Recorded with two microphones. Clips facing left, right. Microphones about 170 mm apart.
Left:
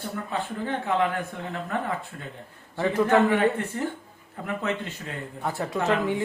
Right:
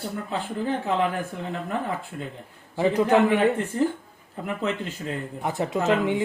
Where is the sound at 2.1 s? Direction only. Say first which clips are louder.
Right 4 dB; 20° right (ahead or behind).